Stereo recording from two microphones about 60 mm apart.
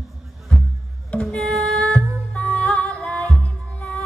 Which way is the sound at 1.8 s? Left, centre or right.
Centre.